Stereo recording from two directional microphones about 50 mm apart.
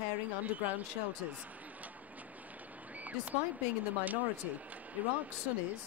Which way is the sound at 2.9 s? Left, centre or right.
Right.